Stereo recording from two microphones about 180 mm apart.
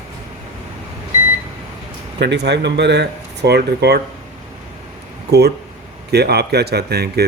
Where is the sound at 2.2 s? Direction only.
70° right (ahead or behind).